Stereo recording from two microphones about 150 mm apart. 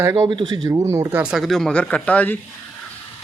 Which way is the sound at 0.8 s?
20° right (ahead or behind).